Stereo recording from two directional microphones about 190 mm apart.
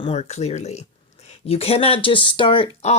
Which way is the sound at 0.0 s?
35° left (ahead or behind).